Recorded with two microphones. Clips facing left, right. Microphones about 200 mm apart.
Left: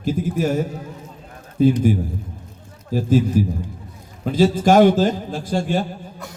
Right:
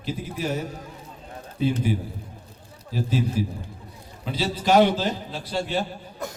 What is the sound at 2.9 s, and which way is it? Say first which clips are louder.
Speech: left 8 dB; 50° left (ahead or behind).